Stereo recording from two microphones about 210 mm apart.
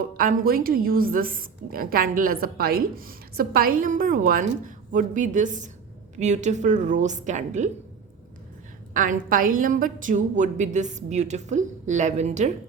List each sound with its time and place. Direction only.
0.2 s a woman's voice: 45° right (ahead or behind)
8.9 s a woman's voice: 40° right (ahead or behind)